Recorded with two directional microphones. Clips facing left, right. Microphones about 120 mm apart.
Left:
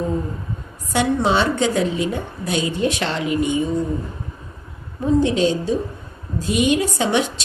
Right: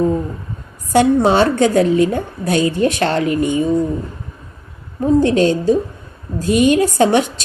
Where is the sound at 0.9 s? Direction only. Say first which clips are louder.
Right 6 dB; 45° right (ahead or behind).